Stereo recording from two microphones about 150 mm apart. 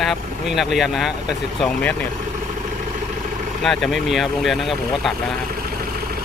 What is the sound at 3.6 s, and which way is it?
Speech, centre (ahead or behind).